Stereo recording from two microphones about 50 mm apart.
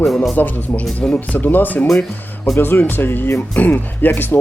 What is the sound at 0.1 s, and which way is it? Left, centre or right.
Speech, centre.